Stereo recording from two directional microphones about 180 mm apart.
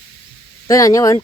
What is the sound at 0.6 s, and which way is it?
Speech, 20° left (ahead or behind).